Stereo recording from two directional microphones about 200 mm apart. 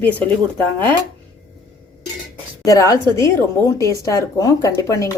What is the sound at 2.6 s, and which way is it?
Speech, 15° left (ahead or behind).